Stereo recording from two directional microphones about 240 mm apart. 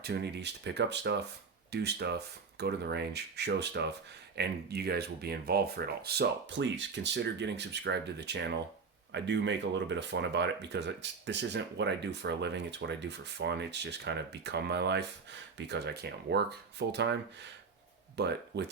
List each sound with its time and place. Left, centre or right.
0.0 s speech: right